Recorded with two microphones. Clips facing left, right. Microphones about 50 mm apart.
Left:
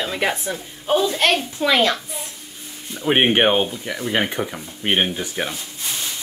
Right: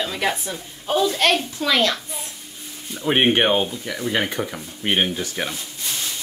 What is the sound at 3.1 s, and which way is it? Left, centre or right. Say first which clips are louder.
A woman's voice: left 1 dB; centre.